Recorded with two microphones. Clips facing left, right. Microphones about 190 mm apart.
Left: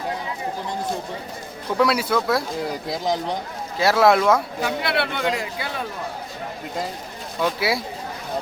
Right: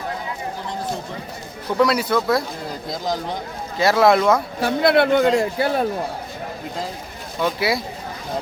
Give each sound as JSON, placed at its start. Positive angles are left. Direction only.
{"t": 1.8, "sound": "speech", "side_deg": 5}
{"t": 3.8, "sound": "speech", "side_deg": 5}
{"t": 4.6, "sound": "speech", "side_deg": -40}
{"t": 7.4, "sound": "speech", "side_deg": 5}